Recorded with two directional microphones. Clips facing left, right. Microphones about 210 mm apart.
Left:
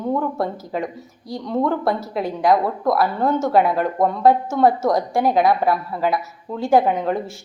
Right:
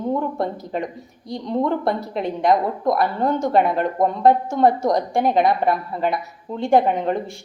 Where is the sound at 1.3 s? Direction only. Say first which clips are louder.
Even; 20° right (ahead or behind).